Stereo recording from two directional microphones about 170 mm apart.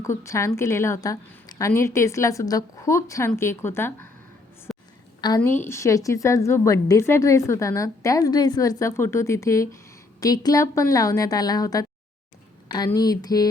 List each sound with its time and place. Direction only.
0.0 s a woman's voice: 15° left (ahead or behind)
4.7 s a sound: centre (ahead or behind)
5.4 s a woman's voice: 15° left (ahead or behind)